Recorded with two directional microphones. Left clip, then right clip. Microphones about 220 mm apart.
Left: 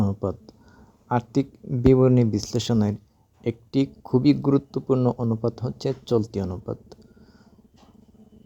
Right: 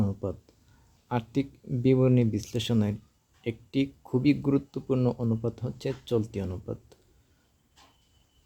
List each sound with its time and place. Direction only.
0.0 s speech: 20° left (ahead or behind)